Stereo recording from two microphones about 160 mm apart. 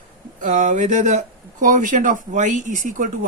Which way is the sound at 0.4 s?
50° right (ahead or behind).